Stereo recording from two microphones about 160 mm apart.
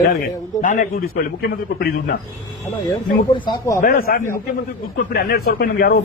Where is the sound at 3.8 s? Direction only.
60° left (ahead or behind).